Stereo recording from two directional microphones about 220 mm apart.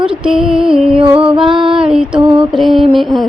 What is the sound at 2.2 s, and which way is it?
Music, 25° right (ahead or behind).